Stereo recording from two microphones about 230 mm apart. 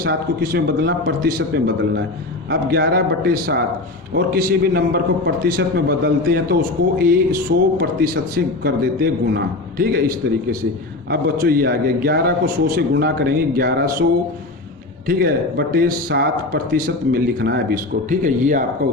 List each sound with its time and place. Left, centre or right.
0.0 s a man's voice: right
15.0 s speech: right
18.1 s a man's voice: right